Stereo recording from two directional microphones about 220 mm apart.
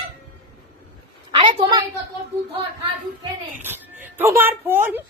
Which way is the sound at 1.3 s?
20° right (ahead or behind).